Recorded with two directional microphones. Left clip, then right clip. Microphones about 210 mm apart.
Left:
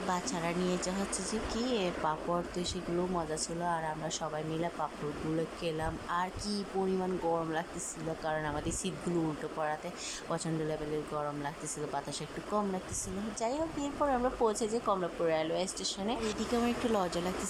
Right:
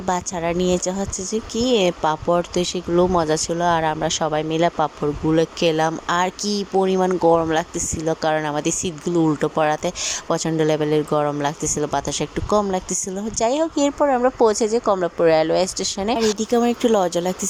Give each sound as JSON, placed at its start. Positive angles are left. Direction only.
{"t": 0.1, "sound": "a woman's voice", "side_deg": -35}